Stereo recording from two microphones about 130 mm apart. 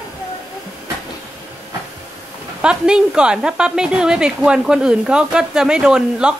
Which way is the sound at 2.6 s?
5° right (ahead or behind).